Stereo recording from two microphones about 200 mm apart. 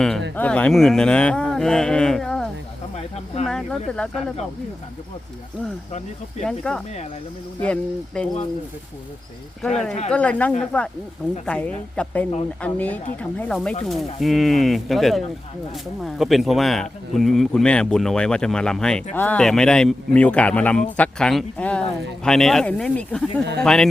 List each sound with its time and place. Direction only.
0.3 s speech: 5° left (ahead or behind)
6.4 s speech: 5° left (ahead or behind)
9.6 s a woman's voice: centre (ahead or behind)